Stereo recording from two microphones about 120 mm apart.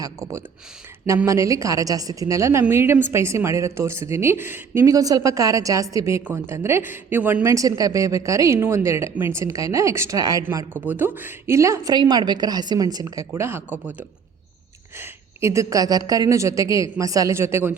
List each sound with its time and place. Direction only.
0.0 s a woman's voice: 25° right (ahead or behind)
14.9 s a woman's voice: 20° right (ahead or behind)